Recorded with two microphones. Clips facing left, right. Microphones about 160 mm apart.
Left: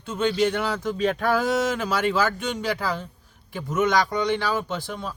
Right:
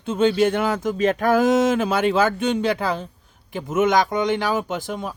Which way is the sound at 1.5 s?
20° right (ahead or behind).